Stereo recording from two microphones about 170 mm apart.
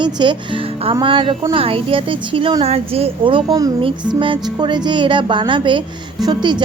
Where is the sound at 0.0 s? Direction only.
25° right (ahead or behind).